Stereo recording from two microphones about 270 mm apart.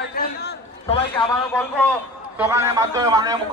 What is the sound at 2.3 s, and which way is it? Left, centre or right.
A man's voice, centre.